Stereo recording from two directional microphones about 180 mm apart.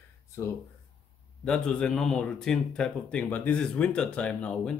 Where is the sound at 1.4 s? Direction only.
5° left (ahead or behind).